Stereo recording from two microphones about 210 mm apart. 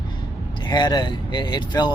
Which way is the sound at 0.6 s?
20° left (ahead or behind).